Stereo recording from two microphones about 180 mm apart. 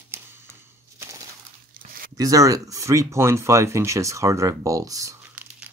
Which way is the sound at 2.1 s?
20° right (ahead or behind).